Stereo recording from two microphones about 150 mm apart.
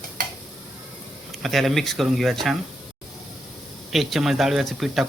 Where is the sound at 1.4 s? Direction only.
Centre (ahead or behind).